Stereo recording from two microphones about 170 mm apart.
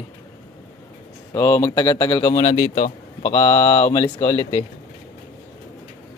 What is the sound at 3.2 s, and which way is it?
Speech, 20° left (ahead or behind).